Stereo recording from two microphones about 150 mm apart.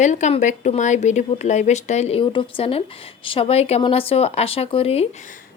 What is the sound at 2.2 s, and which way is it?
A woman's voice, 35° left (ahead or behind).